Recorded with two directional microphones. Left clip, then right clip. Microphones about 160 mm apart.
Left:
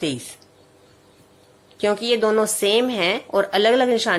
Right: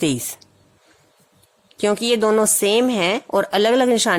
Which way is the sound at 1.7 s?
50° right (ahead or behind).